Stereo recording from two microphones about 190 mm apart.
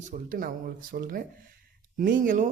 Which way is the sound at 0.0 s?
45° right (ahead or behind).